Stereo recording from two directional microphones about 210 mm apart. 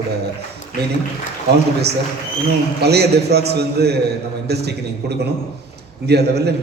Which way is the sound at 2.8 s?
50° right (ahead or behind).